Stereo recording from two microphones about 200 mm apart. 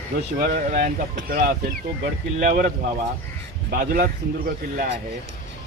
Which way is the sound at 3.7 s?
45° right (ahead or behind).